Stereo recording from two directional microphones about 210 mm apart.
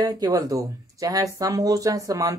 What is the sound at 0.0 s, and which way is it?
Speech, 20° right (ahead or behind).